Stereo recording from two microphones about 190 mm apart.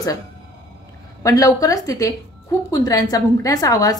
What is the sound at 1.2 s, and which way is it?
A woman's voice, 15° left (ahead or behind).